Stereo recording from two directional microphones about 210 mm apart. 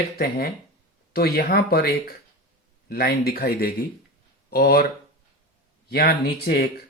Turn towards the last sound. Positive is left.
turn(degrees=45)  # may be behind; listen again after turning